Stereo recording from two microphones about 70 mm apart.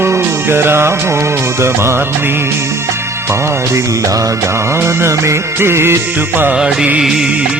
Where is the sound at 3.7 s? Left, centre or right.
Right.